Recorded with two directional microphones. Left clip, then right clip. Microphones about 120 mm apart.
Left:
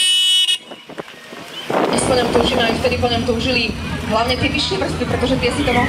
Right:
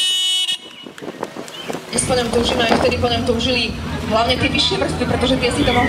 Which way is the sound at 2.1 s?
20° right (ahead or behind).